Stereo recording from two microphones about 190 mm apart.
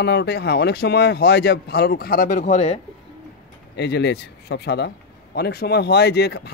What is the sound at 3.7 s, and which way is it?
A man's voice, 65° left (ahead or behind).